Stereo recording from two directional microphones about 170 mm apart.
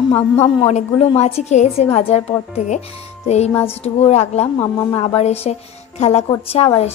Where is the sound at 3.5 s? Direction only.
15° left (ahead or behind).